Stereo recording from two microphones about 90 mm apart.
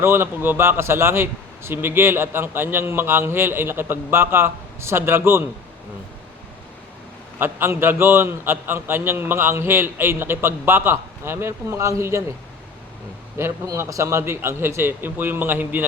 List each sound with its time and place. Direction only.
0.0 s a man's voice: 25° right (ahead or behind)
7.3 s a man's voice: 25° right (ahead or behind)
13.7 s a man's voice: 35° right (ahead or behind)